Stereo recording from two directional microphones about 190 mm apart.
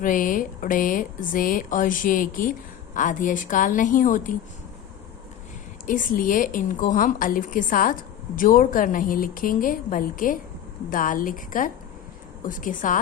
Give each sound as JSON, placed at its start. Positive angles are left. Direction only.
{"t": 0.0, "sound": "a woman's voice", "side_deg": 45}
{"t": 5.8, "sound": "a woman's voice", "side_deg": 45}